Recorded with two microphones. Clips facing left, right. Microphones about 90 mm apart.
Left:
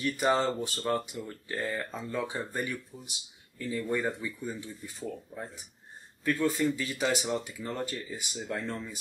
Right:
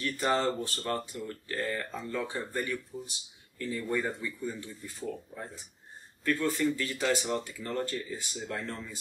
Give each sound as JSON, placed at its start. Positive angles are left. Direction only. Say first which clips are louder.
{"t": 0.0, "sound": "speech", "louder": "left 2 dB", "side_deg": 15}